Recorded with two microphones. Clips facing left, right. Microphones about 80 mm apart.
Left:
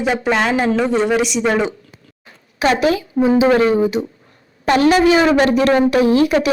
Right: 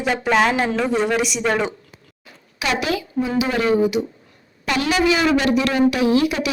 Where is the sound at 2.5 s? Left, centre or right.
Left.